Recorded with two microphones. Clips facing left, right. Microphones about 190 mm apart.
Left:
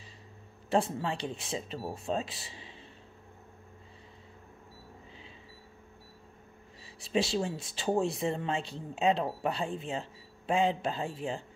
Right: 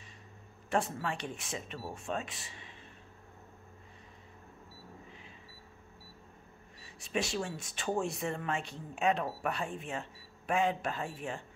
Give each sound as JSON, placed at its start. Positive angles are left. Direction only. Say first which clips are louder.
{"t": 0.7, "sound": "speech", "louder": "left 4 dB", "side_deg": 30}
{"t": 7.1, "sound": "speech", "louder": "left 5 dB", "side_deg": 30}